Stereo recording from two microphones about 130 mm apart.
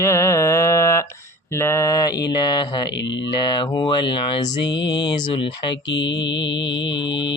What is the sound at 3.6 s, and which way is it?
Speech, 35° left (ahead or behind).